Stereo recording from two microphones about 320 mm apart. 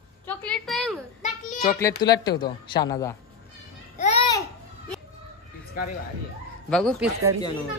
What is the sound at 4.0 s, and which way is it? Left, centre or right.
Babbling, centre.